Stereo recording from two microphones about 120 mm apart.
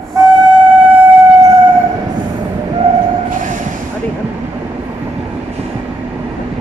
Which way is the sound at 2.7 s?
75° right (ahead or behind).